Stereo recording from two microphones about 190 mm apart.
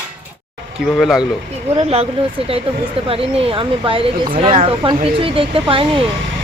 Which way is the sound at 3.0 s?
30° right (ahead or behind).